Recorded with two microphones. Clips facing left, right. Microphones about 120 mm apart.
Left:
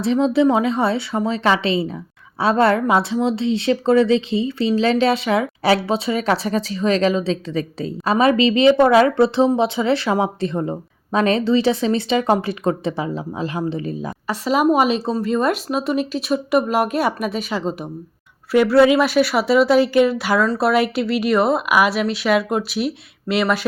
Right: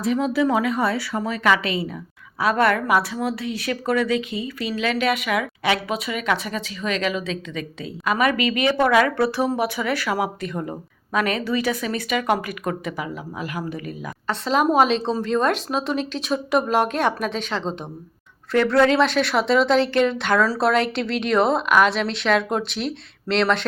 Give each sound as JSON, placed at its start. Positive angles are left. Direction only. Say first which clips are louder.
{"t": 0.0, "sound": "a woman's voice", "louder": "left 5 dB", "side_deg": 25}
{"t": 14.3, "sound": "a woman's voice", "louder": "left 3 dB", "side_deg": 5}